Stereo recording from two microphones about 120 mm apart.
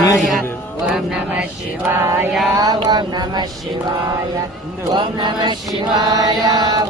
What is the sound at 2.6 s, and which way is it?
Chant, 35° right (ahead or behind).